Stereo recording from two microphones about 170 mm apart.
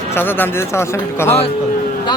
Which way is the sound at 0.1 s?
10° left (ahead or behind).